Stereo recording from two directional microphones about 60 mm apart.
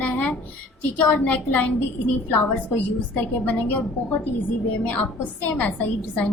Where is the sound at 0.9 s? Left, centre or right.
Left.